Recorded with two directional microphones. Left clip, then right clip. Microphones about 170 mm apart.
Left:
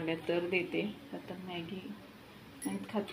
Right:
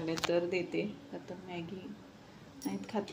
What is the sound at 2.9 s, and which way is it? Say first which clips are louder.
Speech: even; 10° right (ahead or behind).